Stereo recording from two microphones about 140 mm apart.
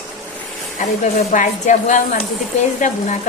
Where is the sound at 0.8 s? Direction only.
60° left (ahead or behind).